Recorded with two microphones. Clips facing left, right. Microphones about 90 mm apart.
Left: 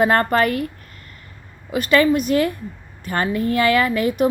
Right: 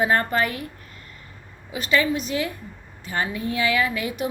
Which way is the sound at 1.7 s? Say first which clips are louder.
Left 6 dB; 55° left (ahead or behind).